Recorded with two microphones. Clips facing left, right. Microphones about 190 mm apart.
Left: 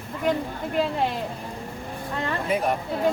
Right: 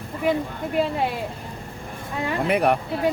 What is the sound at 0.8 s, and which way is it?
Speech, 5° right (ahead or behind).